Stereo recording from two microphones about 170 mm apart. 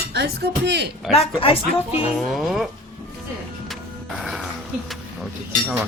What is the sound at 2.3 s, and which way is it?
Speech, centre (ahead or behind).